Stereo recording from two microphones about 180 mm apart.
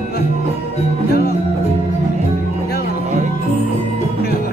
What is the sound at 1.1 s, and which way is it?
Music, 60° left (ahead or behind).